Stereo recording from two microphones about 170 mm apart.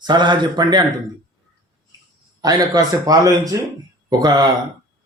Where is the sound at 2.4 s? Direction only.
20° right (ahead or behind).